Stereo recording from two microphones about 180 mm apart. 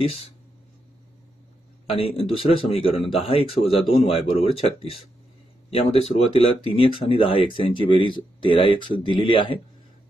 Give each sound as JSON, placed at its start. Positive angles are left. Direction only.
{"t": 1.9, "sound": "speech", "side_deg": 30}